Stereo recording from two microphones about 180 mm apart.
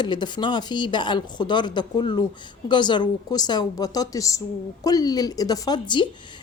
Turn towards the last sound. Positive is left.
turn(degrees=25)  # may be behind; listen again after turning